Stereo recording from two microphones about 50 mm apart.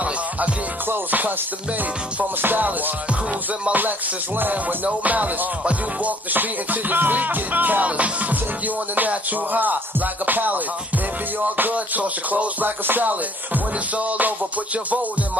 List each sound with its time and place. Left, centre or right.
0.8 s music: right
2.4 s music: right
12.6 s music: right